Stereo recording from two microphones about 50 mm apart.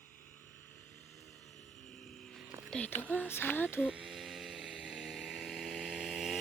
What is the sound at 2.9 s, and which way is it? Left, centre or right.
Speech, left.